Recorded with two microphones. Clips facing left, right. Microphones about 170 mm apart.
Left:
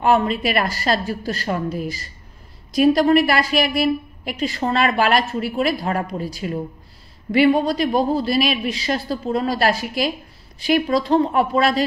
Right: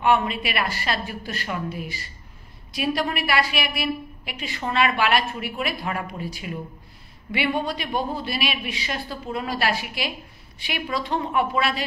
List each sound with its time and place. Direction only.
0.0 s a woman's voice: 40° left (ahead or behind)